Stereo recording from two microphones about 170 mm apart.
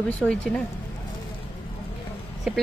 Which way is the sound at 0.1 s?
5° left (ahead or behind).